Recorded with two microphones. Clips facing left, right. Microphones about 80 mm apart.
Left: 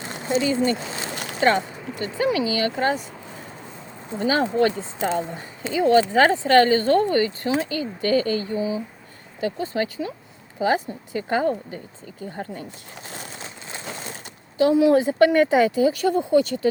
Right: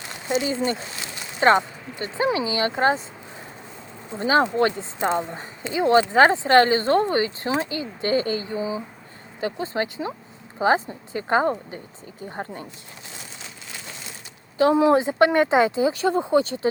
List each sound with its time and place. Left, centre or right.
0.0 s a sound: left
1.1 s a sound: left
1.4 s speech: right
4.2 s speech: right
14.6 s speech: right
14.9 s speech: right